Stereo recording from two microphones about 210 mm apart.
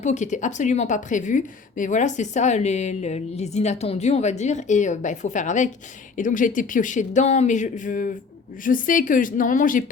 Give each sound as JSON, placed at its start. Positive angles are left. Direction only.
{"t": 0.0, "sound": "a woman's voice", "side_deg": 35}